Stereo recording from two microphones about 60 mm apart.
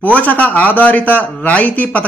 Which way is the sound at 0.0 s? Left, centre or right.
Left.